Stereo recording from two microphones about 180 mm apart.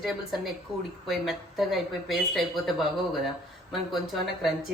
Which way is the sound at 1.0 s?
Centre (ahead or behind).